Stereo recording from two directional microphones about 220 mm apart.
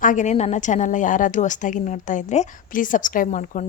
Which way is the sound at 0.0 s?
35° left (ahead or behind).